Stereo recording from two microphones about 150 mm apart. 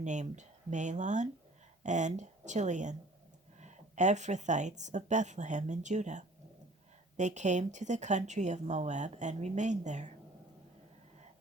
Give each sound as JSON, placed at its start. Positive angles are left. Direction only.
{"t": 0.0, "sound": "speech", "side_deg": -55}